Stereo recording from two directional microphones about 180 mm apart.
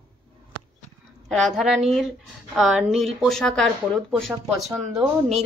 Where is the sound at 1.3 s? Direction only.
Centre (ahead or behind).